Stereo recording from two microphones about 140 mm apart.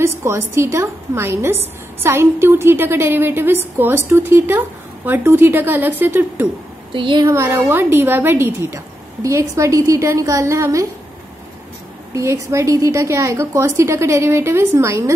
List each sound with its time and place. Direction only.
0.2 s a woman's voice: 20° right (ahead or behind)
6.9 s a woman's voice: 35° right (ahead or behind)
7.2 s a woman's voice: 20° right (ahead or behind)
12.1 s a woman's voice: 20° right (ahead or behind)